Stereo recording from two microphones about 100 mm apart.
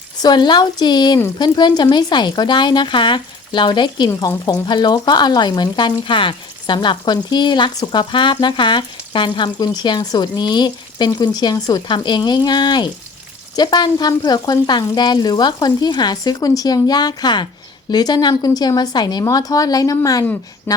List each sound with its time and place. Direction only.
0.2 s speech: 45° left (ahead or behind)
11.9 s a woman's voice: 50° left (ahead or behind)
20.7 s a sound: 20° left (ahead or behind)